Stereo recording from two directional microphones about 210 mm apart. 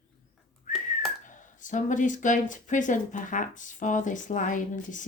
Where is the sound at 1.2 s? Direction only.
35° left (ahead or behind).